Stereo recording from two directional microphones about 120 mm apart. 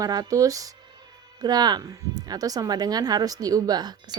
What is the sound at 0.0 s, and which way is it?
A woman's voice, 30° right (ahead or behind).